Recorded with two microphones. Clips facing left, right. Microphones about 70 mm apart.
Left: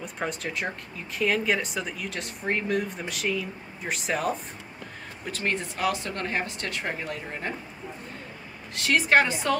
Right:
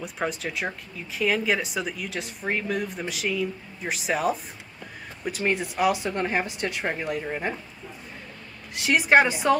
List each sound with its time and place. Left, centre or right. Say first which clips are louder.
0.0 s speech: right 2 dB; centre
8.7 s speech: right 2 dB; centre